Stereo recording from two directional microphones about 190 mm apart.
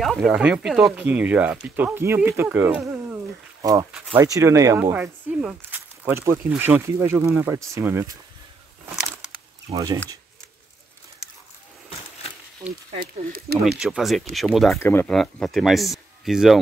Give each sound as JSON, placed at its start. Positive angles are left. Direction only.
{"t": 0.0, "sound": "speech", "side_deg": 0}
{"t": 9.7, "sound": "speech", "side_deg": -30}
{"t": 13.0, "sound": "speech", "side_deg": -55}
{"t": 13.7, "sound": "speech", "side_deg": 0}
{"t": 14.8, "sound": "speech", "side_deg": 10}